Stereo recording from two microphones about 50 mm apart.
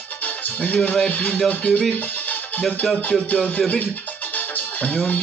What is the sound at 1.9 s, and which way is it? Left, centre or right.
Music, left.